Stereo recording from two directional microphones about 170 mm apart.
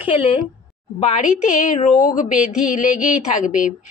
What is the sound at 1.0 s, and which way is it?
A woman's voice, 50° left (ahead or behind).